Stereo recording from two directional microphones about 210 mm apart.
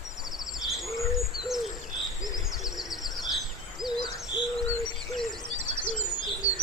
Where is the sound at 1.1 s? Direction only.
Centre (ahead or behind).